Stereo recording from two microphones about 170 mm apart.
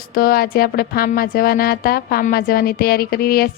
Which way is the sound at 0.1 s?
60° left (ahead or behind).